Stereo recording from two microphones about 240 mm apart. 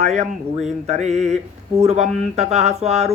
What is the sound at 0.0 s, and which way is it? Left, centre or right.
Speech, right.